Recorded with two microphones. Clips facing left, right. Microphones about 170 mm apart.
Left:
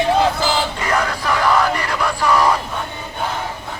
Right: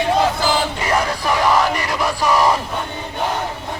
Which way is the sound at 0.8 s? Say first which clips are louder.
Right 1 dB; 25° right (ahead or behind).